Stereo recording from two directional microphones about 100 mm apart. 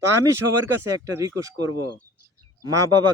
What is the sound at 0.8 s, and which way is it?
Speech, 30° right (ahead or behind).